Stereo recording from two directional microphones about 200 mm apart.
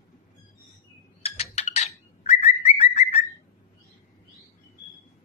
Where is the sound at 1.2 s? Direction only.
30° left (ahead or behind).